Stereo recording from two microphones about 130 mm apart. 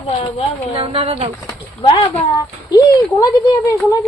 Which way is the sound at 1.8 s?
40° left (ahead or behind).